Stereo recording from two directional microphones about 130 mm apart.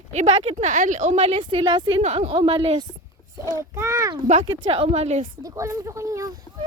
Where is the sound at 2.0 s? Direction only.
55° right (ahead or behind).